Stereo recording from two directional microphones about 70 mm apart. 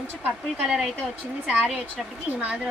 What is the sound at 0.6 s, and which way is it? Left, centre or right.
A woman's voice, centre.